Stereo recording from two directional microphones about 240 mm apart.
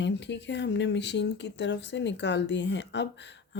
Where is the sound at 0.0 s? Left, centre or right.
Left.